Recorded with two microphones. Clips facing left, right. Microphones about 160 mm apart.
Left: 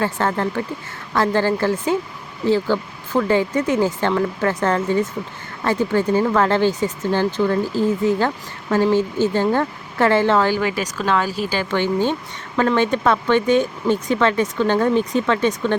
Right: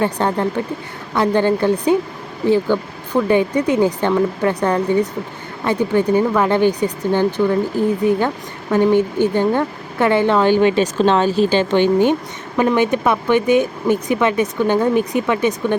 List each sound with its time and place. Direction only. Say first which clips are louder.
0.0 s speech: right 3 dB; 15° right (ahead or behind)